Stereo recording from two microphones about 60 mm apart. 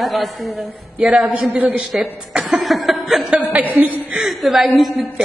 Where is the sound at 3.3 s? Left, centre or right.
Right.